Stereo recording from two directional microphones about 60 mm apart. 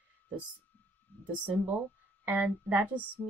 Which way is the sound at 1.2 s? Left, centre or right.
Right.